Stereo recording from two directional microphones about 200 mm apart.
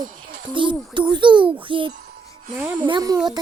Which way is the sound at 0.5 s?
25° right (ahead or behind).